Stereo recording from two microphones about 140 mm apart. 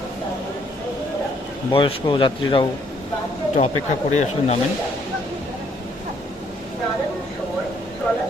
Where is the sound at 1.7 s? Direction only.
35° left (ahead or behind).